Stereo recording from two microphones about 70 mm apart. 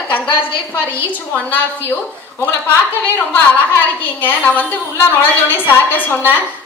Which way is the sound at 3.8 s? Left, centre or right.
Left.